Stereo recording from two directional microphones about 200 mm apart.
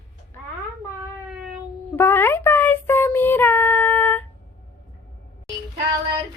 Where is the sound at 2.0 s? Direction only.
10° left (ahead or behind).